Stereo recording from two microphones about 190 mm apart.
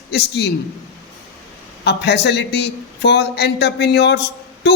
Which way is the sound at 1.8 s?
60° left (ahead or behind).